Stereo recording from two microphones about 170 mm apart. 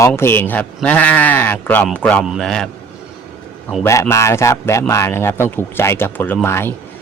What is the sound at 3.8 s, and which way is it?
A man's voice, 15° left (ahead or behind).